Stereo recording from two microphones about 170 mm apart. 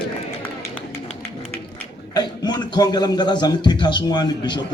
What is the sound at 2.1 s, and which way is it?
A man's voice, 25° left (ahead or behind).